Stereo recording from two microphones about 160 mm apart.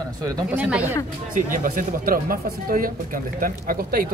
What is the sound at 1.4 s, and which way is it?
Speech, 60° right (ahead or behind).